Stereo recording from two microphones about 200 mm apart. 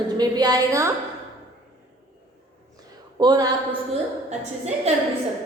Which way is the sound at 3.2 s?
20° right (ahead or behind).